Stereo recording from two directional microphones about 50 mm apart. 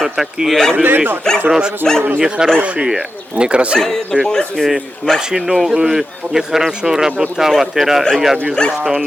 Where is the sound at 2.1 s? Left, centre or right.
Centre.